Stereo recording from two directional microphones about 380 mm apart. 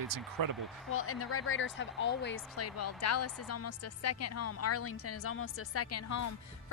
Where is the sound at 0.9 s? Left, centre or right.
Left.